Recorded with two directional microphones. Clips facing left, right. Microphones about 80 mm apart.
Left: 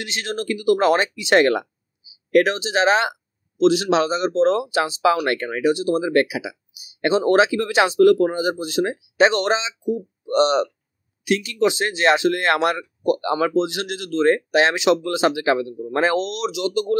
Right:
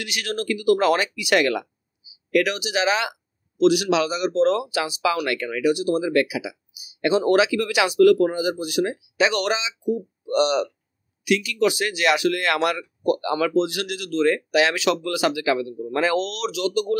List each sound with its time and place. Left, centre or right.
0.0 s speech: left
16.3 s speech: left